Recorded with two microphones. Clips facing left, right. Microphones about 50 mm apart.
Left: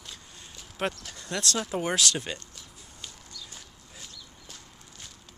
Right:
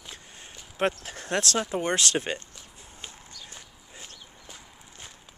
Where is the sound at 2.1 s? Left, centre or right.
Right.